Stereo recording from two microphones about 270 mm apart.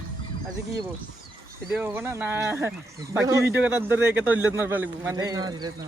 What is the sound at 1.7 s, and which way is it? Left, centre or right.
A man's voice, centre.